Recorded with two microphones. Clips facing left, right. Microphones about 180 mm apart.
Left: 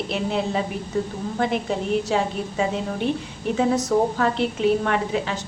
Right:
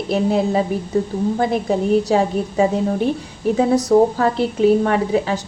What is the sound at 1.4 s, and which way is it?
A woman's voice, 35° right (ahead or behind).